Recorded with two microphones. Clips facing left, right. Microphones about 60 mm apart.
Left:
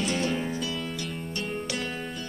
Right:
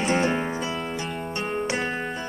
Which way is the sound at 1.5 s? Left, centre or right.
Right.